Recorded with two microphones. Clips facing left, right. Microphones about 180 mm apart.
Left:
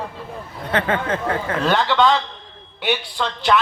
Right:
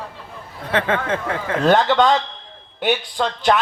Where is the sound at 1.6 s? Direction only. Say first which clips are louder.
Right 3 dB; 50° right (ahead or behind).